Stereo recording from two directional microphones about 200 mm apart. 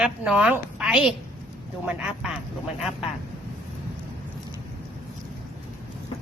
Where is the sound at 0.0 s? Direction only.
5° right (ahead or behind).